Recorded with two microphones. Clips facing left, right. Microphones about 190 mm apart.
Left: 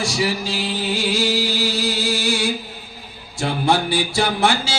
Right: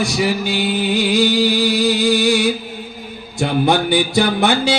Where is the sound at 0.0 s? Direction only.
60° right (ahead or behind).